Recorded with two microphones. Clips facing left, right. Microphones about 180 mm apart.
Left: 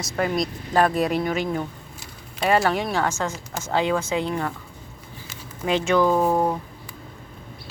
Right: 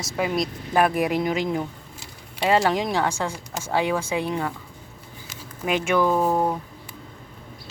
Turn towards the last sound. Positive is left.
turn(degrees=0)  # may be behind; listen again after turning